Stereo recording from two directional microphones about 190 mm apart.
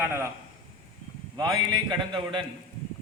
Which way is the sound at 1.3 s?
20° right (ahead or behind).